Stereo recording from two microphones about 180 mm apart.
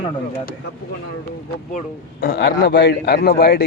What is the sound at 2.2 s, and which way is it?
A man's voice, 65° left (ahead or behind).